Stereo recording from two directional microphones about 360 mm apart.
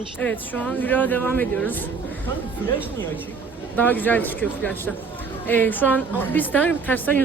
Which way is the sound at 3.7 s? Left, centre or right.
Centre.